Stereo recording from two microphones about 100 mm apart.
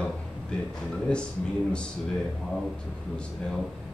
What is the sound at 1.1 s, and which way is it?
Speech, 10° left (ahead or behind).